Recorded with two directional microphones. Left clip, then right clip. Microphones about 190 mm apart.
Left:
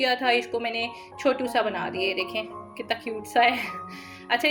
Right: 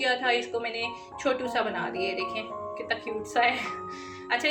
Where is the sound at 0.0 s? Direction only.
40° left (ahead or behind).